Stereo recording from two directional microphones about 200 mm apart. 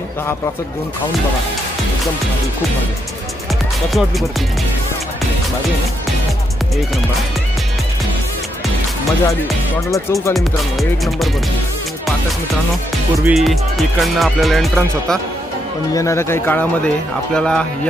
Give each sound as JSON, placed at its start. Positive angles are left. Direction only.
{"t": 9.9, "sound": "speech", "side_deg": 15}
{"t": 10.3, "sound": "speech", "side_deg": 0}
{"t": 13.2, "sound": "speech", "side_deg": 0}
{"t": 15.9, "sound": "speech", "side_deg": 15}